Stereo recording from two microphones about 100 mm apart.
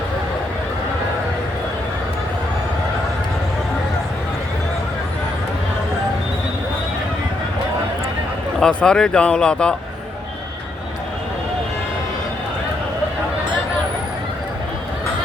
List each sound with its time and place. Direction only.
8.6 s speech: 10° left (ahead or behind)